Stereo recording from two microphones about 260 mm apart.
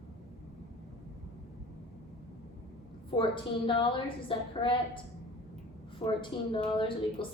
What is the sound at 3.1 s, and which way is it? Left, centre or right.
A woman's voice, centre.